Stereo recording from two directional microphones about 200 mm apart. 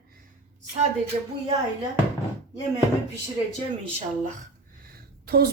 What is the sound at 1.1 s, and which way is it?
Speech, 35° right (ahead or behind).